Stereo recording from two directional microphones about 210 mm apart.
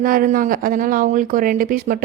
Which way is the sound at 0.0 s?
40° right (ahead or behind).